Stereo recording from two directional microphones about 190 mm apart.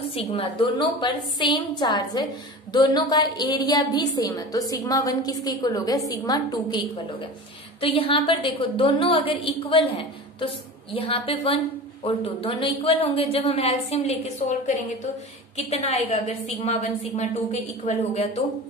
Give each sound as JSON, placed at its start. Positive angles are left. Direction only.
{"t": 0.1, "sound": "a woman's voice", "side_deg": 30}